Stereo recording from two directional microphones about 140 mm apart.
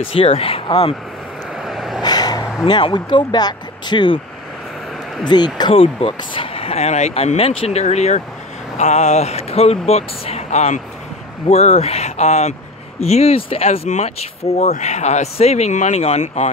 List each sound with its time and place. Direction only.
0.0 s speech: 40° left (ahead or behind)
1.6 s vehicle: centre (ahead or behind)
2.0 s a sound: 30° left (ahead or behind)
2.6 s speech: 35° left (ahead or behind)
5.3 s speech: 30° left (ahead or behind); by 16.4 s 55° left (ahead or behind)